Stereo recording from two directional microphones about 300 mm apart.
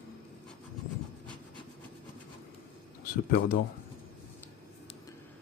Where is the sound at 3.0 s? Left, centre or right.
Left.